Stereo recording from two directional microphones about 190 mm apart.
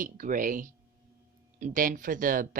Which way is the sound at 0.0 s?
45° right (ahead or behind).